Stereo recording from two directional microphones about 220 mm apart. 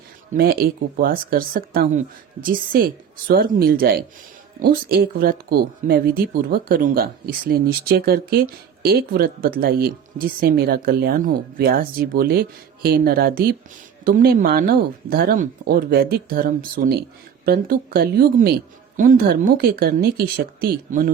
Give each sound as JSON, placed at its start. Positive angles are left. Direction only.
{"t": 0.3, "sound": "speech", "side_deg": -40}